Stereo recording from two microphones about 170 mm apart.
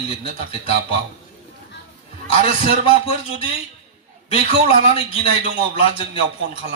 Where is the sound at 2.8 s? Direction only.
35° left (ahead or behind).